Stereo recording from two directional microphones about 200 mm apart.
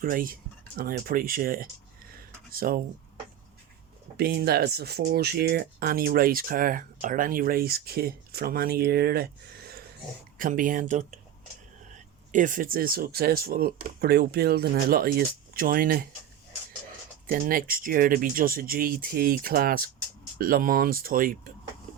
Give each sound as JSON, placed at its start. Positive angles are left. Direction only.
{"t": 0.0, "sound": "speech", "side_deg": -45}
{"t": 2.1, "sound": "a sound", "side_deg": -45}
{"t": 4.2, "sound": "speech", "side_deg": -50}
{"t": 17.2, "sound": "speech", "side_deg": -45}